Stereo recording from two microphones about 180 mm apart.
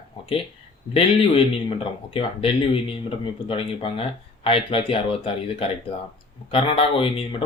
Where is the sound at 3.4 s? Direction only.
30° left (ahead or behind).